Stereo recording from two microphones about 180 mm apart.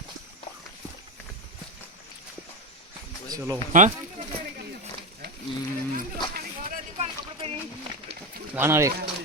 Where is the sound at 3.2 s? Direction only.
20° right (ahead or behind).